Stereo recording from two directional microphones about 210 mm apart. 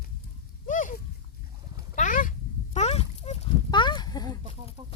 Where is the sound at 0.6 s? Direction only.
40° left (ahead or behind).